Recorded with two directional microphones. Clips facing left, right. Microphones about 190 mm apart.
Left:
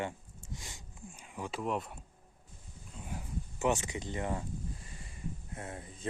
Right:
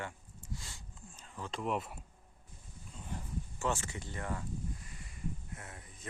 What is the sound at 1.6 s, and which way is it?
Speech, centre (ahead or behind).